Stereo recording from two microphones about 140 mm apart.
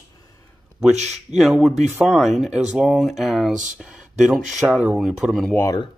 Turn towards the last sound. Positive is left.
turn(degrees=25)  # may be behind; listen again after turning